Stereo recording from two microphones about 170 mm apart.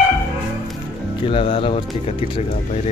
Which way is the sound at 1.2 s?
35° left (ahead or behind).